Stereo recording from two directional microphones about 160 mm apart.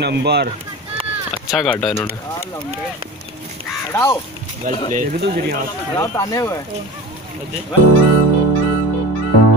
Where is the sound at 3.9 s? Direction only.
15° left (ahead or behind).